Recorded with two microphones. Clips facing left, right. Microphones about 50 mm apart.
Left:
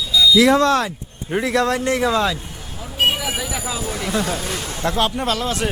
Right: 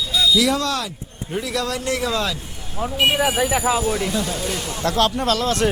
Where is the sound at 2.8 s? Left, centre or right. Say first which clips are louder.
Right 2 dB; right.